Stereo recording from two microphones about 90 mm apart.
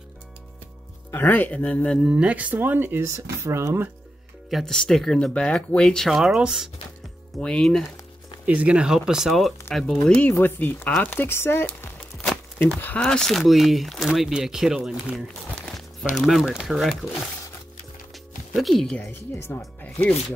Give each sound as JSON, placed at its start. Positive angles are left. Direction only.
{"t": 1.1, "sound": "speech", "side_deg": 20}
{"t": 2.0, "sound": "speech", "side_deg": -15}
{"t": 3.1, "sound": "speech", "side_deg": -35}
{"t": 4.5, "sound": "speech", "side_deg": 0}
{"t": 7.3, "sound": "speech", "side_deg": 10}
{"t": 8.5, "sound": "speech", "side_deg": -15}
{"t": 10.4, "sound": "speech", "side_deg": 20}
{"t": 18.6, "sound": "speech", "side_deg": 0}
{"t": 18.9, "sound": "speech", "side_deg": 20}
{"t": 19.3, "sound": "speech", "side_deg": 30}
{"t": 19.8, "sound": "speech", "side_deg": 20}